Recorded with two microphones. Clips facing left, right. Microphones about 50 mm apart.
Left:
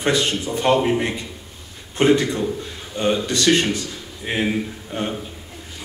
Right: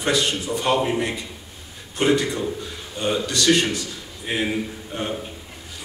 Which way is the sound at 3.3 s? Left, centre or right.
Left.